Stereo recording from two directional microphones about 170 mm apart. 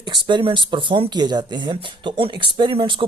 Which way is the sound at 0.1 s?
30° right (ahead or behind).